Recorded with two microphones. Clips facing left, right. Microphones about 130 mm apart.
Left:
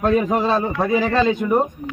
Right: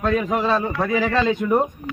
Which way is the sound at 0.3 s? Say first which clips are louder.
Left 2 dB; 30° left (ahead or behind).